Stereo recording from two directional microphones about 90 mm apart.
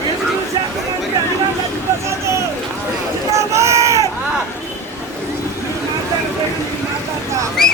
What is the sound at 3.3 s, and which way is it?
Boat, 35° right (ahead or behind).